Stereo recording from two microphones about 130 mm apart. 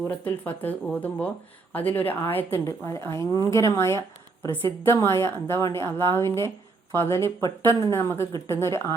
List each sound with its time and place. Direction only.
0.1 s a woman's voice: 15° left (ahead or behind)